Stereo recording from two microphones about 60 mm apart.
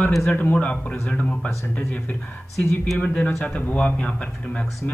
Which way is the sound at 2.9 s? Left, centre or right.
Left.